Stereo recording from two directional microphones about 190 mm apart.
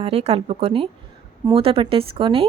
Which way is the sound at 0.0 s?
35° right (ahead or behind).